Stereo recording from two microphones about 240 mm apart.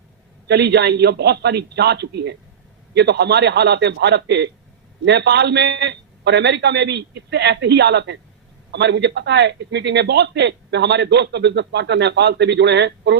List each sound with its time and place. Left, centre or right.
0.4 s a man's voice: right